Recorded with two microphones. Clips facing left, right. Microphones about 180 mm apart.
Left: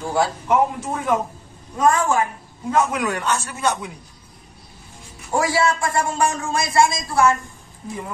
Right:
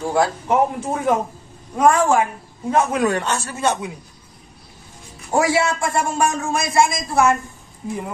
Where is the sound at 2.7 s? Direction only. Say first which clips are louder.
Right 2 dB; 30° right (ahead or behind).